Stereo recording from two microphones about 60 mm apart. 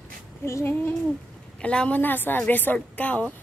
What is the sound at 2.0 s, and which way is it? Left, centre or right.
A woman's voice, left.